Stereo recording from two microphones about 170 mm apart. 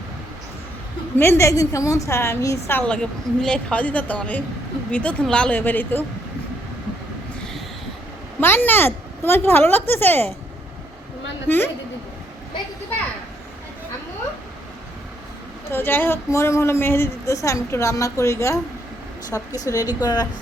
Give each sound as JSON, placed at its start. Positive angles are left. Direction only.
{"t": 1.2, "sound": "a woman's voice", "side_deg": 15}
{"t": 8.4, "sound": "a woman's voice", "side_deg": 15}
{"t": 11.4, "sound": "a woman's voice", "side_deg": 10}
{"t": 15.7, "sound": "a woman's voice", "side_deg": 15}